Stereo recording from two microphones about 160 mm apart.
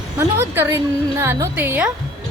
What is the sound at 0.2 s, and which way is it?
A woman's voice, 15° right (ahead or behind).